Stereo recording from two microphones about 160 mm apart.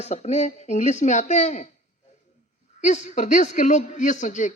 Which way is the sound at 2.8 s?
50° left (ahead or behind).